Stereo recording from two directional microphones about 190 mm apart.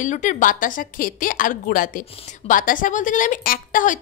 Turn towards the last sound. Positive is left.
turn(degrees=45)  # may be behind; listen again after turning